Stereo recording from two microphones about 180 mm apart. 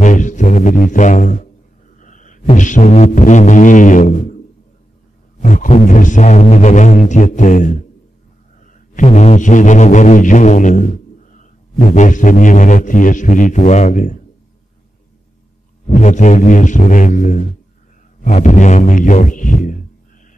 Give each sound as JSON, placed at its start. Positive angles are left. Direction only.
{"t": 0.0, "sound": "music", "side_deg": 45}
{"t": 5.4, "sound": "a man's voice", "side_deg": 40}
{"t": 8.9, "sound": "a man's voice", "side_deg": 40}
{"t": 15.9, "sound": "a man's voice", "side_deg": 45}